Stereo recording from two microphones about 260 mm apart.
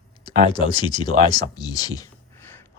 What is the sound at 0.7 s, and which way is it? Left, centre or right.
Speech, centre.